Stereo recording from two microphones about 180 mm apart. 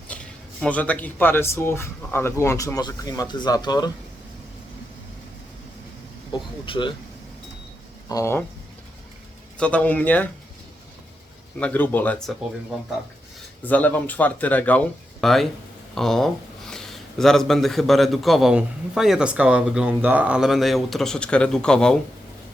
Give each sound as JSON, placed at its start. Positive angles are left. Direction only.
{"t": 0.1, "sound": "a sound", "side_deg": 5}
{"t": 0.6, "sound": "speech", "side_deg": 10}
{"t": 6.3, "sound": "speech", "side_deg": 25}
{"t": 8.1, "sound": "speech", "side_deg": 15}
{"t": 9.6, "sound": "speech", "side_deg": 5}
{"t": 11.6, "sound": "speech", "side_deg": 10}
{"t": 13.7, "sound": "speech", "side_deg": 10}